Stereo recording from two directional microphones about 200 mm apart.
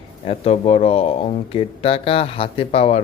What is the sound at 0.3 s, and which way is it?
Speech, 30° left (ahead or behind).